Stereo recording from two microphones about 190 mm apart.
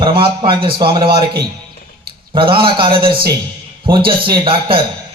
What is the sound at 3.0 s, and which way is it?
Speech, 55° right (ahead or behind).